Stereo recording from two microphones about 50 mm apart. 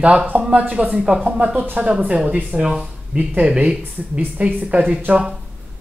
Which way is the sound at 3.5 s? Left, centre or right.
Right.